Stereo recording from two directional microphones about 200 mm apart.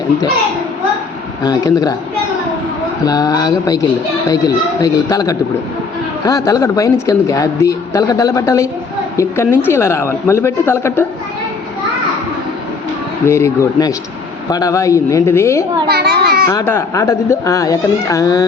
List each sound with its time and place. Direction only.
1.5 s speech: 20° left (ahead or behind)
3.0 s speech: 20° left (ahead or behind)
13.2 s speech: 15° left (ahead or behind)
15.9 s a child's voice: 50° right (ahead or behind)
16.5 s speech: 15° left (ahead or behind)